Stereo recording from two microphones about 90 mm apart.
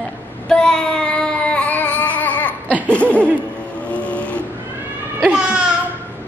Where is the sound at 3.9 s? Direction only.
15° left (ahead or behind).